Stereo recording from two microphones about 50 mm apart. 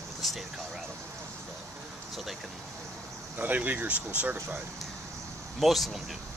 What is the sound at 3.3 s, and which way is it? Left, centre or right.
Speech, right.